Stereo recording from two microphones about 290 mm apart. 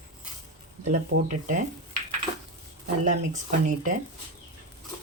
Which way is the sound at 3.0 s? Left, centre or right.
Right.